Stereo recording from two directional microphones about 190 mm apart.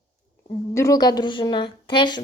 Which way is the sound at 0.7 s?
15° left (ahead or behind).